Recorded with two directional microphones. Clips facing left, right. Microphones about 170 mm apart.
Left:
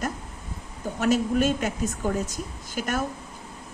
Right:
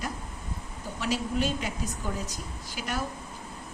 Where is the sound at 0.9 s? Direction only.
50° left (ahead or behind).